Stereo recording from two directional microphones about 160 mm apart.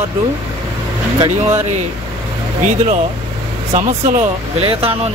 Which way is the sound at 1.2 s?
15° right (ahead or behind).